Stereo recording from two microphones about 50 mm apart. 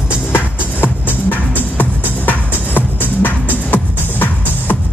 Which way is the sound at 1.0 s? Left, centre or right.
Left.